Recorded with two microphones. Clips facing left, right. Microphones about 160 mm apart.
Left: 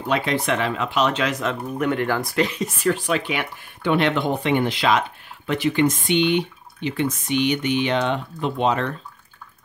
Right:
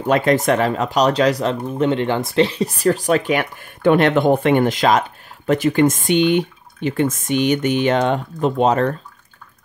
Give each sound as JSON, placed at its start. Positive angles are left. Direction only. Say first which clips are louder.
{"t": 0.0, "sound": "speech", "louder": "right 7 dB", "side_deg": -45}